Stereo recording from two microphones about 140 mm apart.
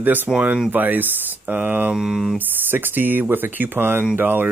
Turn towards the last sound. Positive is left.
turn(degrees=-15)  # may be behind; listen again after turning